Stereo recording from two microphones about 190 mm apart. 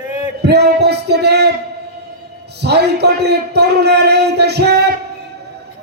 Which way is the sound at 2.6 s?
60° right (ahead or behind).